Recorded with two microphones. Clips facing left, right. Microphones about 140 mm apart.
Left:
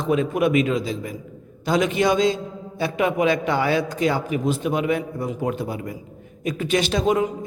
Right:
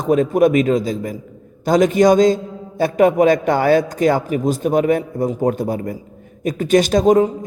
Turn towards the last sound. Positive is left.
turn(degrees=-40)  # may be behind; listen again after turning